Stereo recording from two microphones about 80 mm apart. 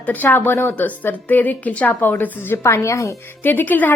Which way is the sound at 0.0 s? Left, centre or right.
Left.